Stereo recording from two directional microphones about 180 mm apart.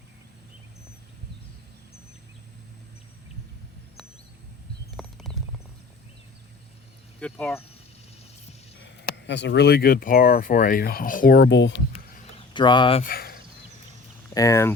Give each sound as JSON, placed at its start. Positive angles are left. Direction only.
{"t": 4.9, "sound": "horse", "side_deg": 0}
{"t": 7.2, "sound": "speech", "side_deg": 10}
{"t": 9.0, "sound": "speech", "side_deg": 75}
{"t": 12.5, "sound": "speech", "side_deg": 25}
{"t": 13.0, "sound": "speech", "side_deg": 55}
{"t": 14.3, "sound": "speech", "side_deg": 20}